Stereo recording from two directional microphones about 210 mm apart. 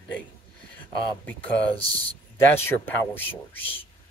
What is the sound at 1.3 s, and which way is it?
Speech, 10° left (ahead or behind).